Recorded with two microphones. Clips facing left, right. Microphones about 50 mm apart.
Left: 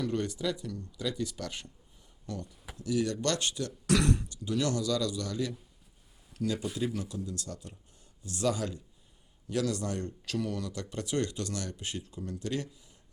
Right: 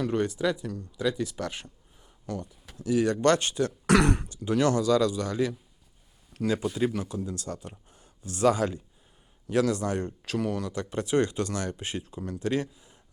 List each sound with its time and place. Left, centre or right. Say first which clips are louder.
0.1 s speech: right 5 dB; centre
2.8 s speech: right 7 dB; right
6.3 s speech: right 5 dB; right
9.5 s speech: right 6 dB; right